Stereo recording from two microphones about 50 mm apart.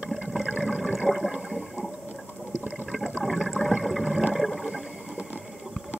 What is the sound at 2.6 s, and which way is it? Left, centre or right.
Toilet flush, centre.